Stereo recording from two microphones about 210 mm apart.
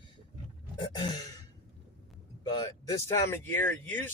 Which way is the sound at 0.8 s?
20° left (ahead or behind).